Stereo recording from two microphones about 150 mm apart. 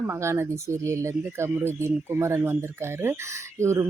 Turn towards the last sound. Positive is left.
turn(degrees=-20)  # may be behind; listen again after turning